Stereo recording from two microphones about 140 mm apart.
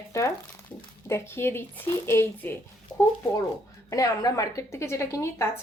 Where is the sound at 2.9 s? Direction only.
20° left (ahead or behind).